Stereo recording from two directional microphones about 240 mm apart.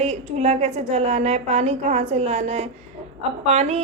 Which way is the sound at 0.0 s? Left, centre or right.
Right.